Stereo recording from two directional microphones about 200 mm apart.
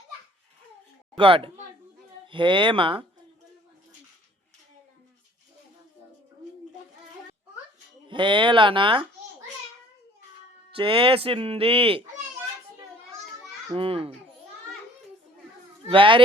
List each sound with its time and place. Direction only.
1.1 s speech: 25° right (ahead or behind)
8.0 s speech: 25° right (ahead or behind)
10.8 s speech: 25° right (ahead or behind)
13.7 s speech: 30° right (ahead or behind)
15.9 s speech: 25° right (ahead or behind)